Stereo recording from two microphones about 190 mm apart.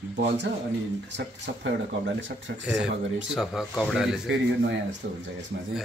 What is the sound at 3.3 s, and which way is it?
Speech, centre (ahead or behind).